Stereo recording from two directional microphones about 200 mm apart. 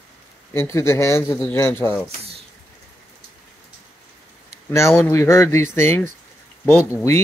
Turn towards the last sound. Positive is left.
turn(degrees=15)  # may be behind; listen again after turning